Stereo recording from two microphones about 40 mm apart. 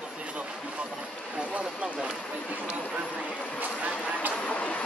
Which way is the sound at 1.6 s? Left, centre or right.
Centre.